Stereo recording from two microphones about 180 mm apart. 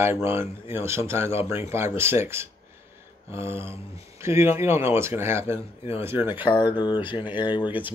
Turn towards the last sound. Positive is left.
turn(degrees=25)  # may be behind; listen again after turning